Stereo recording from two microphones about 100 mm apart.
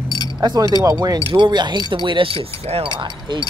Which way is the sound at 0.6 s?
35° right (ahead or behind).